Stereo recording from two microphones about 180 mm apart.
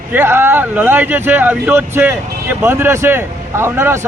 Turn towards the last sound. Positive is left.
turn(degrees=-15)  # may be behind; listen again after turning